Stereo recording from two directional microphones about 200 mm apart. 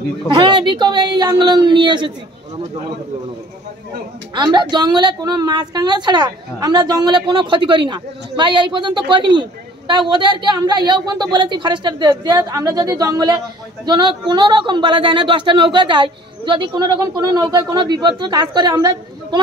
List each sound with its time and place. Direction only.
0.3 s speech: 20° right (ahead or behind)
4.4 s speech: 20° right (ahead or behind)